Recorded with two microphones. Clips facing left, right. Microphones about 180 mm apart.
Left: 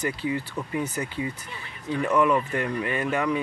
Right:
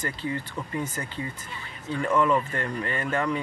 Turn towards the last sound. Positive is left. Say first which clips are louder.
# left 2 dB
turn(degrees=10)  # may be behind; listen again after turning